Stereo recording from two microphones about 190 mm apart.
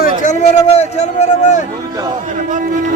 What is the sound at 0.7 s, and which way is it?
Speech, 35° left (ahead or behind).